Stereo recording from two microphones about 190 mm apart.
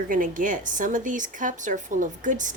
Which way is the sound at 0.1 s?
45° right (ahead or behind).